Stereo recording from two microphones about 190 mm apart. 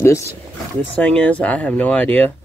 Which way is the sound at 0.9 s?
5° left (ahead or behind).